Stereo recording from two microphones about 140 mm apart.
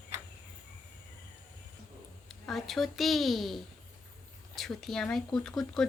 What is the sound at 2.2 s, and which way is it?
Speech, centre (ahead or behind).